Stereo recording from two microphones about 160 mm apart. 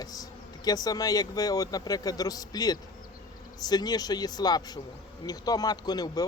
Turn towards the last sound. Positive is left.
turn(degrees=25)  # may be behind; listen again after turning